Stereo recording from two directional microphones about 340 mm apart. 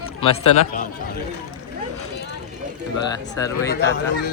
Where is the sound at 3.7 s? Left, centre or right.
Left.